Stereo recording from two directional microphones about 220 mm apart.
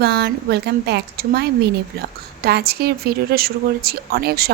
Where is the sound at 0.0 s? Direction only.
50° right (ahead or behind).